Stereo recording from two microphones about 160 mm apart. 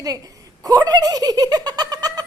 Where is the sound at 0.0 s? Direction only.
20° right (ahead or behind).